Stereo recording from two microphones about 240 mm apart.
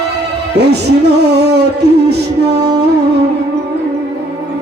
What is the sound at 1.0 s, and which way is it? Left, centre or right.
Music, right.